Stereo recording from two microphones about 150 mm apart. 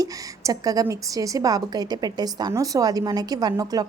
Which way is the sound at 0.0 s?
25° right (ahead or behind).